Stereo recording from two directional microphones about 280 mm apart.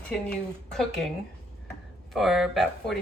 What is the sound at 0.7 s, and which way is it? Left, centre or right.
Speech, centre.